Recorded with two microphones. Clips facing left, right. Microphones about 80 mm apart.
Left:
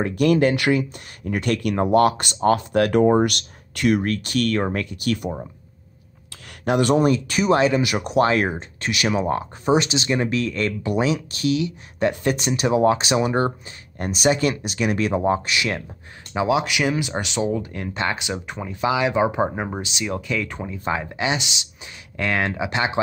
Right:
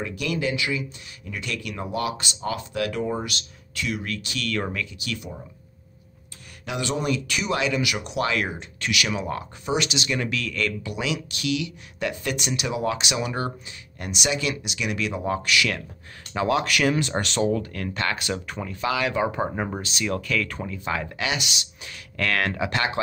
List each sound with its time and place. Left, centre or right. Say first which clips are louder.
0.0 s speech: left 9 dB; left
6.6 s speech: left 10 dB; left
16.3 s speech: left 2 dB; centre